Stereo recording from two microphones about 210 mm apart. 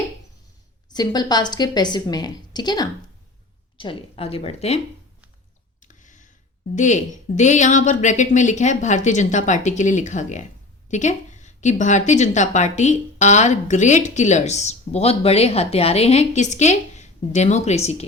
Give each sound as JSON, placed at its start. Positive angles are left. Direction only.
{"t": 0.9, "sound": "a woman's voice", "side_deg": 20}
{"t": 5.8, "sound": "a sound", "side_deg": 35}
{"t": 6.7, "sound": "a woman's voice", "side_deg": 35}